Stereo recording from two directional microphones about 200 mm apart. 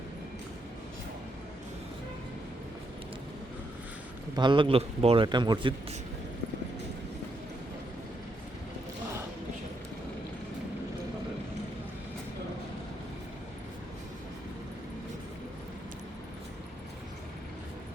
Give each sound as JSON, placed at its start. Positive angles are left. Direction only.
{"t": 4.4, "sound": "a man's voice", "side_deg": -25}